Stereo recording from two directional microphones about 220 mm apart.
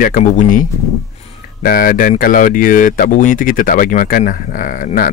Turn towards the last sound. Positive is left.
turn(degrees=40)  # may be behind; listen again after turning